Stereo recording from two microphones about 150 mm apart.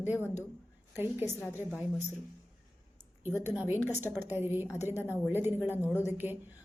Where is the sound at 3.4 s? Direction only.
15° right (ahead or behind).